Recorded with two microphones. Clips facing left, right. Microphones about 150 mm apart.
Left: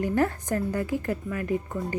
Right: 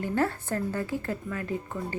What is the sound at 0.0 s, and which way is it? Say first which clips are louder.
A woman's voice: left 3 dB; 15° left (ahead or behind).